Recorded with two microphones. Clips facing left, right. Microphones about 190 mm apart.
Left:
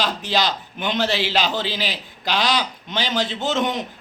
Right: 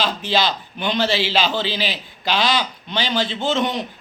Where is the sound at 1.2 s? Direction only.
15° left (ahead or behind).